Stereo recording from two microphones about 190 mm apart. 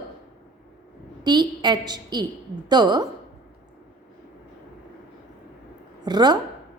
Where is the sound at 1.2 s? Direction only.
25° right (ahead or behind).